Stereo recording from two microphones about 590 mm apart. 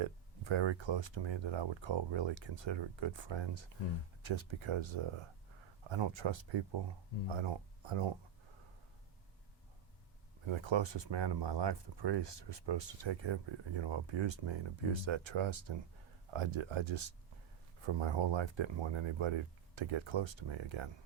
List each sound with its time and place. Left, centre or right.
0.0 s speech: right
10.4 s speech: right